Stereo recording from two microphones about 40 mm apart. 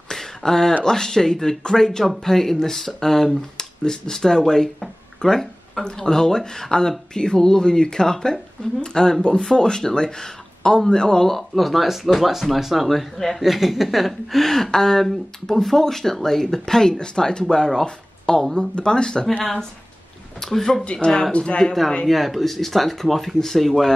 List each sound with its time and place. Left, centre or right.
0.1 s a sound: centre
0.8 s speech: centre
11.2 s speech: centre; by 19.2 s left
20.3 s speech: centre
20.8 s speech: left
22.0 s speech: centre